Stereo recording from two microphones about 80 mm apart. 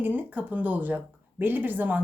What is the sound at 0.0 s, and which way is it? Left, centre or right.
Speech, right.